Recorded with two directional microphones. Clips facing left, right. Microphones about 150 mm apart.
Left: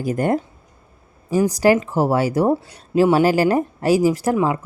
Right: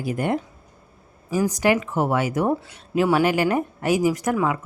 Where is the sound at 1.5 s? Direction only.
35° left (ahead or behind).